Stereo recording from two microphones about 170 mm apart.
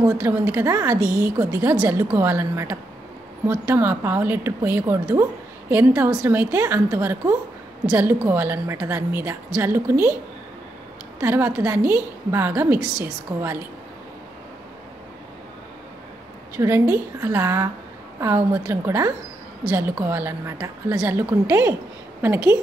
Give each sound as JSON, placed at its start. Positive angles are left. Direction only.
{"t": 0.0, "sound": "a woman's voice", "side_deg": -15}
{"t": 11.1, "sound": "a woman's voice", "side_deg": -15}
{"t": 16.5, "sound": "a woman's voice", "side_deg": -15}